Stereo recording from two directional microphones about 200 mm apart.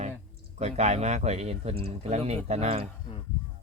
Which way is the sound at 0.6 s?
35° right (ahead or behind).